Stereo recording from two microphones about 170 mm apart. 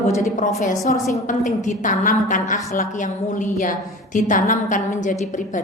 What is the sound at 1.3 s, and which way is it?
A woman's voice, 45° left (ahead or behind).